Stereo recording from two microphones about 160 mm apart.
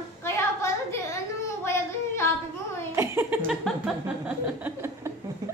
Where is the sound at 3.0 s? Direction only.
15° right (ahead or behind).